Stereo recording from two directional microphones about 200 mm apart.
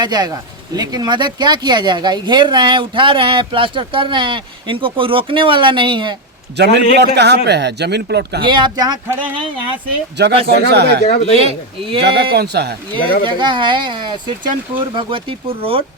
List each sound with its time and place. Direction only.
0.0 s speech: 20° right (ahead or behind)
6.6 s speech: 55° right (ahead or behind)
8.4 s speech: 20° right (ahead or behind)
10.4 s speech: 55° right (ahead or behind)
11.0 s speech: 35° left (ahead or behind)
11.3 s speech: 30° right (ahead or behind)
12.0 s speech: 55° right (ahead or behind)
12.9 s speech: 25° right (ahead or behind)